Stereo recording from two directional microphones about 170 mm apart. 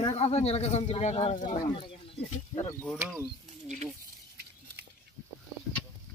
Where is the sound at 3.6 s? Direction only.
45° right (ahead or behind).